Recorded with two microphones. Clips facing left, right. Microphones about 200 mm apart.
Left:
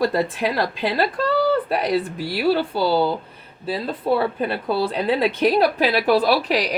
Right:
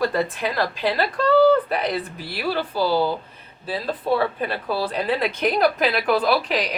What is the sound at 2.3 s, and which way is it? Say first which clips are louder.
Speech: left 6 dB; 30° left (ahead or behind).